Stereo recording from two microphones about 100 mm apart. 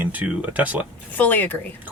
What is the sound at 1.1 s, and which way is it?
Speech, 20° left (ahead or behind).